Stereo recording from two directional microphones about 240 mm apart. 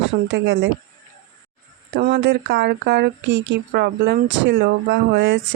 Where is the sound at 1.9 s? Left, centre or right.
Right.